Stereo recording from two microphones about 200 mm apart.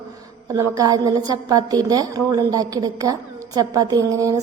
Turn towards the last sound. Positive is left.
turn(degrees=-15)  # may be behind; listen again after turning